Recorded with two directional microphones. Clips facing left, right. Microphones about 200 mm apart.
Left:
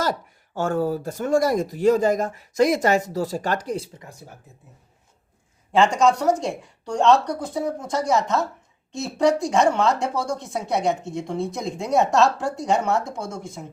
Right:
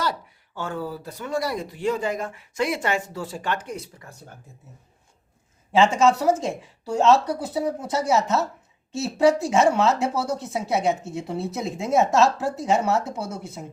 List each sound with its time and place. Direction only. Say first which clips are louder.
0.0 s speech: left 3 dB; 45° left (ahead or behind)
5.7 s speech: even; centre (ahead or behind)